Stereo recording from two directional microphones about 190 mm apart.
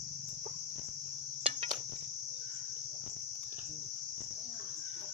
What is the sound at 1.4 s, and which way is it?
Cricket, 30° right (ahead or behind).